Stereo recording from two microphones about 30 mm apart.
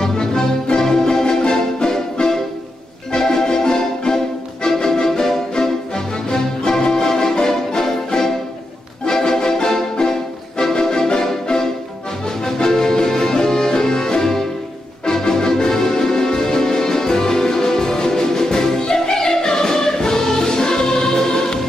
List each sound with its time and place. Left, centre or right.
0.0 s music: left